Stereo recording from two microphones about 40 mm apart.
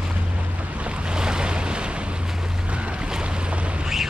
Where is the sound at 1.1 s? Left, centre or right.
Centre.